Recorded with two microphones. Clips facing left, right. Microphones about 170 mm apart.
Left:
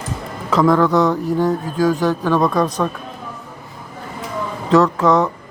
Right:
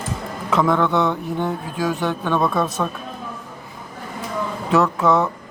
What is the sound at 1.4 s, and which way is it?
Speech, 40° left (ahead or behind).